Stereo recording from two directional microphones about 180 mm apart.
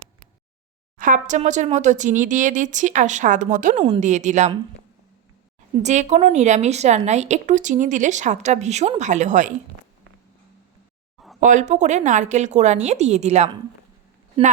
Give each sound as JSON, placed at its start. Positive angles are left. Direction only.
{"t": 0.9, "sound": "speech", "side_deg": -45}
{"t": 3.8, "sound": "a woman's voice", "side_deg": -30}
{"t": 4.0, "sound": "a woman's voice", "side_deg": -40}
{"t": 5.7, "sound": "a woman's voice", "side_deg": -40}
{"t": 11.3, "sound": "a woman's voice", "side_deg": -45}